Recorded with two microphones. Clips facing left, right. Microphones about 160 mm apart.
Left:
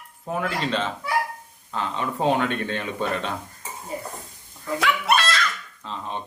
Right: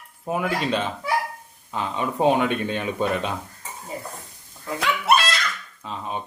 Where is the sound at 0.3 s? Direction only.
10° right (ahead or behind).